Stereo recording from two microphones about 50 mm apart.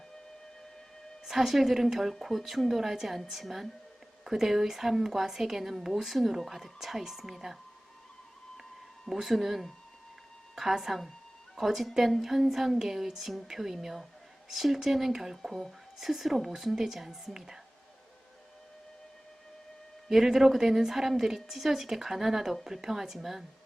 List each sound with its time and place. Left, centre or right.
1.2 s a woman's voice: centre
9.0 s a woman's voice: centre
20.1 s a woman's voice: centre